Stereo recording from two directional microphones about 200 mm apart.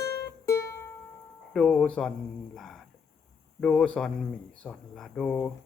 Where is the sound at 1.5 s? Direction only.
Centre (ahead or behind).